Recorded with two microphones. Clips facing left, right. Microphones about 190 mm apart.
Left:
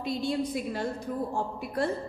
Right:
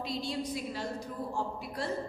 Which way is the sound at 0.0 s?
55° left (ahead or behind).